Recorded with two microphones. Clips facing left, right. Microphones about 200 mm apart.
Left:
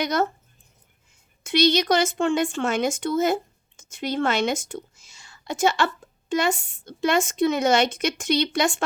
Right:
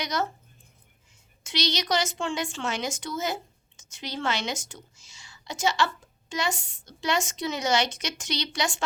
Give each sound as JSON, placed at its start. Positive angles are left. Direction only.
{"t": 0.0, "sound": "speech", "side_deg": 55}
{"t": 1.5, "sound": "speech", "side_deg": 55}